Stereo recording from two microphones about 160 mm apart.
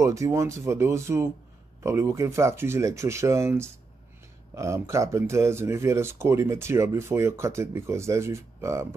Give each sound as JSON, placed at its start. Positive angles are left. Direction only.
{"t": 0.0, "sound": "speech", "side_deg": -20}